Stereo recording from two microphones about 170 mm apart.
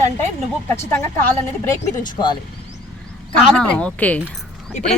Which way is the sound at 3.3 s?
5° left (ahead or behind).